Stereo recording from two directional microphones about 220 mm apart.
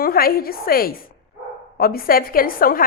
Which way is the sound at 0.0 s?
40° left (ahead or behind).